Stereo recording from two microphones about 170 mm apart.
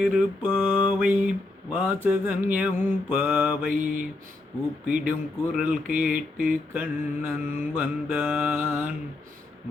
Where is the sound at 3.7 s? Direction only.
50° right (ahead or behind).